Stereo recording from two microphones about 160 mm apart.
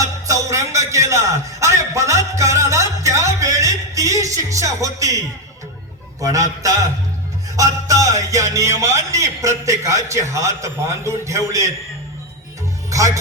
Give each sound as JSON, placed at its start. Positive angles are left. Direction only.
{"t": 0.0, "sound": "music", "side_deg": -20}
{"t": 6.2, "sound": "a man's voice", "side_deg": -20}
{"t": 12.9, "sound": "speech", "side_deg": -20}